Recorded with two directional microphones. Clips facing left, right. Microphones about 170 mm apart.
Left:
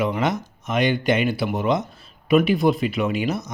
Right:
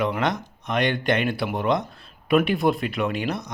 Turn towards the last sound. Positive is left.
turn(degrees=5)  # may be behind; listen again after turning